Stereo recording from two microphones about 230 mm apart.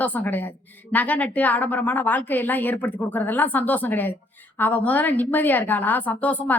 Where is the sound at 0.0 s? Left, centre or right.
Centre.